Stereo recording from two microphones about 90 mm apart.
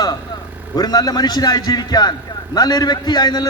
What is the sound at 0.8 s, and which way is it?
A man's voice, 45° left (ahead or behind).